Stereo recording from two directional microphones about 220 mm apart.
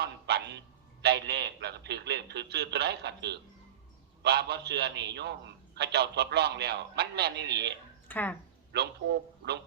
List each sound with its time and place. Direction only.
0.0 s a sound: 50° right (ahead or behind)
1.0 s a man's voice: 50° right (ahead or behind)
8.0 s speech: 10° left (ahead or behind)
8.7 s a man's voice: 50° right (ahead or behind)